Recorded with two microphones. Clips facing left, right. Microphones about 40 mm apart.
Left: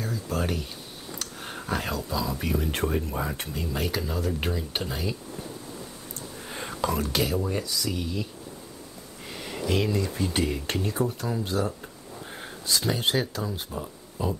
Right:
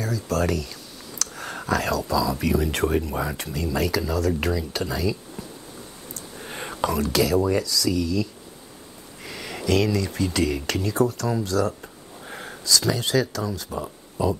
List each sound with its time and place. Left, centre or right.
0.0 s speech: right
1.1 s a sound: right
1.7 s speech: right
2.4 s speech: right
4.4 s speech: right
6.4 s whispering: right
7.5 s speech: right
9.2 s speech: right
12.3 s a sound: right
12.6 s speech: right
14.2 s speech: right